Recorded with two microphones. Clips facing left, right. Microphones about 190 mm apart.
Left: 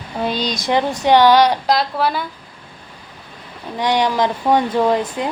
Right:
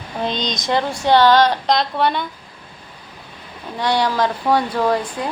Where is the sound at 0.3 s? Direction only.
5° left (ahead or behind).